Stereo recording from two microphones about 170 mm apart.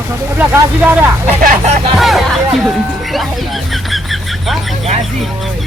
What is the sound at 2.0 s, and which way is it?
Speech, centre (ahead or behind).